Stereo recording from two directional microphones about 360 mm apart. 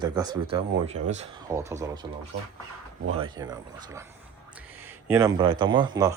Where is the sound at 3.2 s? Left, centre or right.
Centre.